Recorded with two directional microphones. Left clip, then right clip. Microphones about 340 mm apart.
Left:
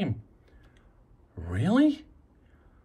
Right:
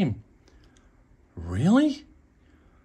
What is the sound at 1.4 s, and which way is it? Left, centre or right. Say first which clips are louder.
Speech: right 2 dB; centre.